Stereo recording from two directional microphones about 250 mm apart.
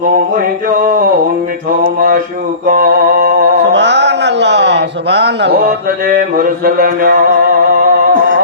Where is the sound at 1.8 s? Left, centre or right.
Right.